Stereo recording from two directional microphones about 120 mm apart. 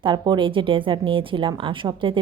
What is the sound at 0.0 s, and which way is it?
A woman's voice, 40° right (ahead or behind).